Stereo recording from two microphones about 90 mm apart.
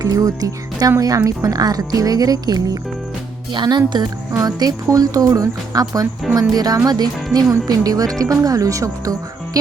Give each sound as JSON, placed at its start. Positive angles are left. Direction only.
{"t": 0.0, "sound": "speech", "side_deg": -40}
{"t": 3.5, "sound": "speech", "side_deg": -55}
{"t": 4.4, "sound": "speech", "side_deg": -40}